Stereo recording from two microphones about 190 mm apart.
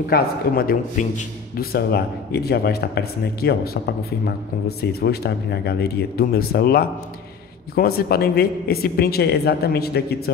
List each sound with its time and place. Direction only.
0.1 s a man's voice: 50° left (ahead or behind)